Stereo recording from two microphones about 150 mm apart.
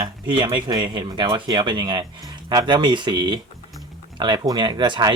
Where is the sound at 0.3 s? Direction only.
30° right (ahead or behind).